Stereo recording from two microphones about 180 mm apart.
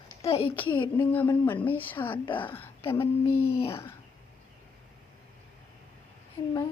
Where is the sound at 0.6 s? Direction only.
10° left (ahead or behind).